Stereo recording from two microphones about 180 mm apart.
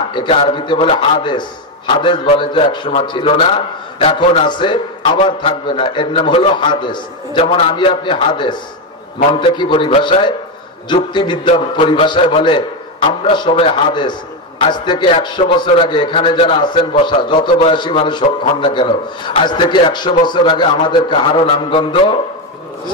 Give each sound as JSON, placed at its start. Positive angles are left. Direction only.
{"t": 0.1, "sound": "a man's voice", "side_deg": 25}